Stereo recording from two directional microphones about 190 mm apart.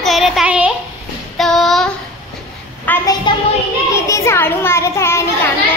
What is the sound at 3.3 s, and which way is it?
Child singing, 25° left (ahead or behind).